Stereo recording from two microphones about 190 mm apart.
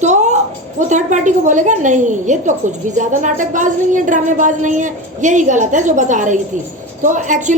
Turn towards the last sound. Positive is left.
turn(degrees=-40)  # may be behind; listen again after turning